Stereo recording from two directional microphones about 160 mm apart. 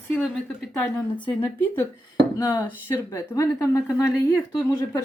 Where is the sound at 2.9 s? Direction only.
15° left (ahead or behind).